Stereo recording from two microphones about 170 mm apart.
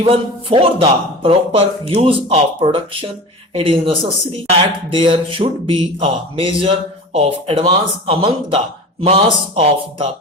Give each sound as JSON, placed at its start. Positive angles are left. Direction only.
{"t": 0.0, "sound": "speech", "side_deg": -30}